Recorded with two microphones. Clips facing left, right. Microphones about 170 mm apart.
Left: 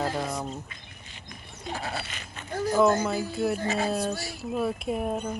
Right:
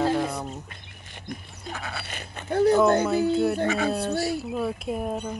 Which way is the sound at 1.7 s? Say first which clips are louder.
Left 2 dB; 35° left (ahead or behind).